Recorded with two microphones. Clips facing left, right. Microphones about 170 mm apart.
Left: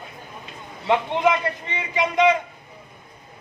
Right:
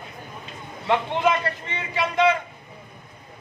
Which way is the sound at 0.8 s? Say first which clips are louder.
Left 2 dB; 15° left (ahead or behind).